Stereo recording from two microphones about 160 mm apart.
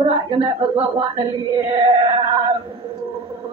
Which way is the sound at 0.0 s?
30° right (ahead or behind).